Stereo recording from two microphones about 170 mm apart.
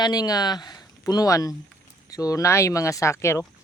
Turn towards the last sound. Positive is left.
turn(degrees=15)  # may be behind; listen again after turning